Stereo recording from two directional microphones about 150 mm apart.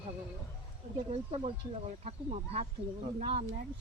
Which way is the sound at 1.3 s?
40° right (ahead or behind).